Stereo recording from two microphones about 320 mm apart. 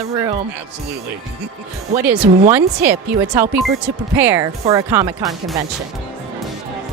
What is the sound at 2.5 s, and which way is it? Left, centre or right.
A woman's voice, centre.